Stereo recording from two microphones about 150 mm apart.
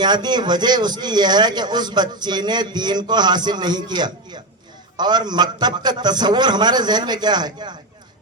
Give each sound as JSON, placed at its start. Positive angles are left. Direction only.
{"t": 0.0, "sound": "a man's voice", "side_deg": -30}